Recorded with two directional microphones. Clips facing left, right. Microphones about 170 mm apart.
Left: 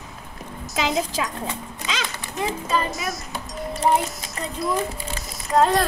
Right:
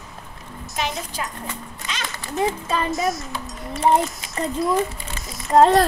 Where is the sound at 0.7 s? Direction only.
90° left.